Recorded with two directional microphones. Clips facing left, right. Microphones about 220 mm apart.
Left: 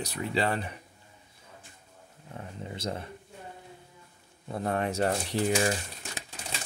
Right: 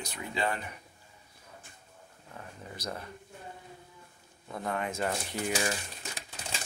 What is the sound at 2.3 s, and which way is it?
Speech, 25° left (ahead or behind).